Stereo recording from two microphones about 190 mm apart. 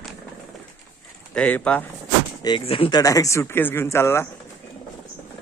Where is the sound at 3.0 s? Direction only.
20° left (ahead or behind).